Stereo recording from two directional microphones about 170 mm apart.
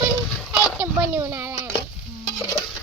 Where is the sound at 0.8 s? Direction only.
15° right (ahead or behind).